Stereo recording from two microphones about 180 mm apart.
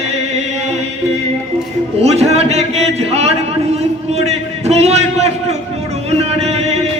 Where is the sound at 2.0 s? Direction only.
35° right (ahead or behind).